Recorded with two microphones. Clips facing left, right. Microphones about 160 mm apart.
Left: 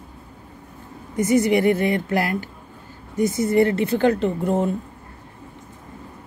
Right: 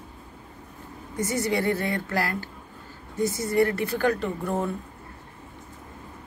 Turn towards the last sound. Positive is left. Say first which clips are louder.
# left 7 dB
turn(degrees=20)  # may be behind; listen again after turning